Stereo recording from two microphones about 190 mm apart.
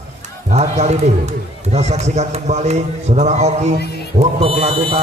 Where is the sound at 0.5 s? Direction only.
35° right (ahead or behind).